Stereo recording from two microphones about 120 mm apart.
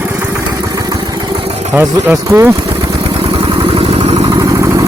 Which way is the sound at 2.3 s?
30° right (ahead or behind).